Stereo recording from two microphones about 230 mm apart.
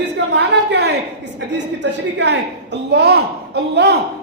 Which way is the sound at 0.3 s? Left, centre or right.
Right.